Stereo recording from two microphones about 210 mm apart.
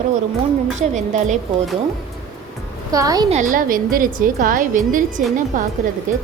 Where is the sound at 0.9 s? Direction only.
35° right (ahead or behind).